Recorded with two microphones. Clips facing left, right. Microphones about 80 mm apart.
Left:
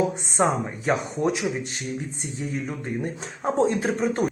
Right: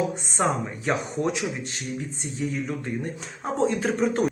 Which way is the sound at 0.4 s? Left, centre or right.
Left.